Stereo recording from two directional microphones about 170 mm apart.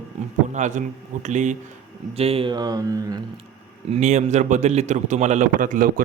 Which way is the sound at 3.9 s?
45° right (ahead or behind).